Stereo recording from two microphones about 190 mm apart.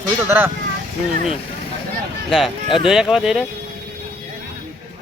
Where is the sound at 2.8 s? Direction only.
Centre (ahead or behind).